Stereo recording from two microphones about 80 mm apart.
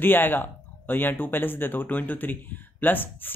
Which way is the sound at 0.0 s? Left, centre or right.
Left.